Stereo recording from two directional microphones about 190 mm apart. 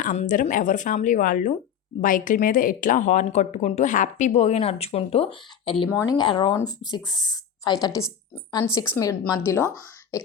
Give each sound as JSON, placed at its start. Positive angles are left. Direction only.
{"t": 0.0, "sound": "a woman's voice", "side_deg": 40}